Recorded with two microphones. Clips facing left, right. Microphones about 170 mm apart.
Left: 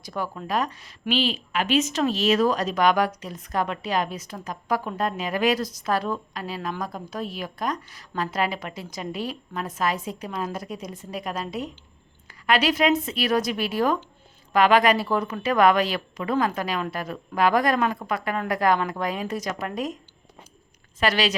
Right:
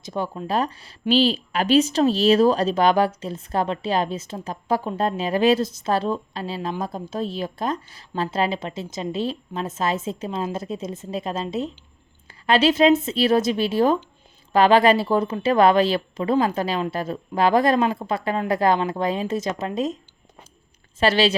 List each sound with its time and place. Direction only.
0.0 s a woman's voice: 25° right (ahead or behind)
21.0 s a woman's voice: 30° right (ahead or behind)